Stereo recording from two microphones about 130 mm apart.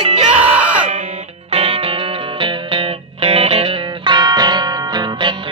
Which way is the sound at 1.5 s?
50° right (ahead or behind).